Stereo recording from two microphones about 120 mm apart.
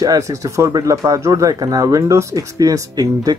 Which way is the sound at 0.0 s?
30° right (ahead or behind).